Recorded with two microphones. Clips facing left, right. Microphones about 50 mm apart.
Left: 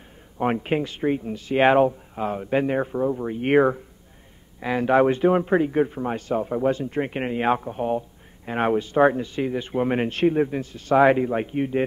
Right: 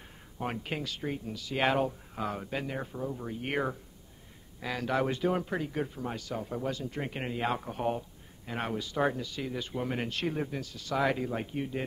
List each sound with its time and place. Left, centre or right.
0.4 s speech: left
2.5 s speech: left
7.6 s speech: centre
8.5 s speech: left